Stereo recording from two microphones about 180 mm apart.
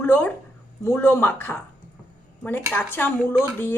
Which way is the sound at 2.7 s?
10° left (ahead or behind).